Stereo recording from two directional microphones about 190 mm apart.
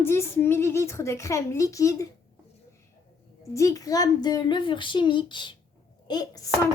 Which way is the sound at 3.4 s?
15° left (ahead or behind).